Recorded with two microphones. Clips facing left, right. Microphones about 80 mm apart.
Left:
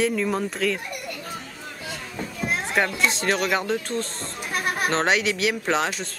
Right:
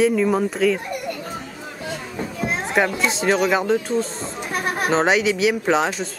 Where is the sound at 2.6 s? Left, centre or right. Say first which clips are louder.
Right 3 dB; centre.